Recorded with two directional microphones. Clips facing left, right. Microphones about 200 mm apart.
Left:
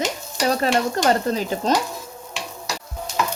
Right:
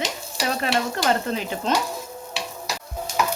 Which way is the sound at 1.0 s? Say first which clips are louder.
Left 3 dB; 40° left (ahead or behind).